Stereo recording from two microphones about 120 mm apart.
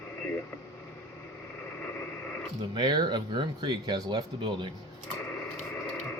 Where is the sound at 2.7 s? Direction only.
35° right (ahead or behind).